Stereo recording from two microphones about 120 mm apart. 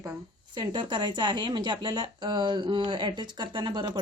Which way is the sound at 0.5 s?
40° right (ahead or behind).